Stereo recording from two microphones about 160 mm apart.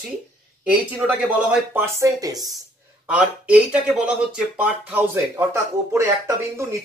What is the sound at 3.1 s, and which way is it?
Speech, 10° right (ahead or behind).